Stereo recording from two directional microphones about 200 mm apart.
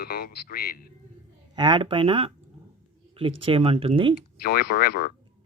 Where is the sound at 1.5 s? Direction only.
25° right (ahead or behind).